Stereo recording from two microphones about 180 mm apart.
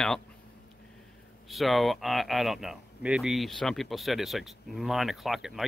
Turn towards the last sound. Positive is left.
turn(degrees=0)  # may be behind; listen again after turning